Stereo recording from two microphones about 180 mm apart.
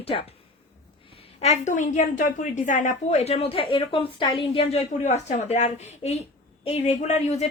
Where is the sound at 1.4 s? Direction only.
40° left (ahead or behind).